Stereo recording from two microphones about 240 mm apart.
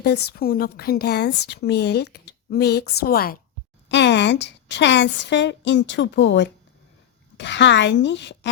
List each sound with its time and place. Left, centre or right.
0.0 s a woman's voice: left